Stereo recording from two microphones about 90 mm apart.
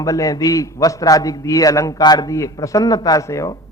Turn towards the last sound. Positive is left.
turn(degrees=35)  # may be behind; listen again after turning